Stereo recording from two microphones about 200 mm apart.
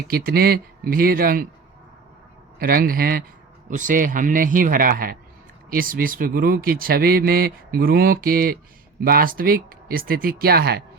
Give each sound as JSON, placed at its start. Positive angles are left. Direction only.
{"t": 0.1, "sound": "speech", "side_deg": -50}
{"t": 2.6, "sound": "speech", "side_deg": -45}